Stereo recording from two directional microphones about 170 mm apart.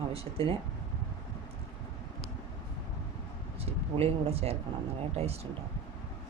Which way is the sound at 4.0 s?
35° right (ahead or behind).